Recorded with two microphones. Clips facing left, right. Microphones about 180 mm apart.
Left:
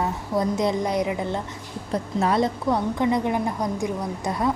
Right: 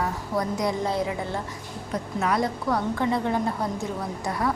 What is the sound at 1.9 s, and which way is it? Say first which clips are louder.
A woman's voice: left 3 dB; 30° left (ahead or behind).